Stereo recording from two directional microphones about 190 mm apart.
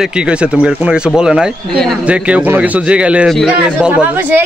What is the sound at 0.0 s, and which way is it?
A man's voice, 5° right (ahead or behind).